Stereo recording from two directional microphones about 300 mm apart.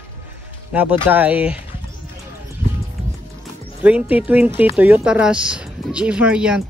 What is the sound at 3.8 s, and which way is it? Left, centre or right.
Speech, centre.